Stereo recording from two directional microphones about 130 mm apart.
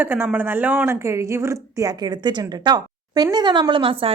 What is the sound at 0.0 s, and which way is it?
A woman's voice, 15° right (ahead or behind).